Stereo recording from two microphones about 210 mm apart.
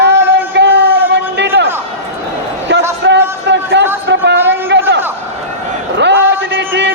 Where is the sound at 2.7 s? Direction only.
50° right (ahead or behind).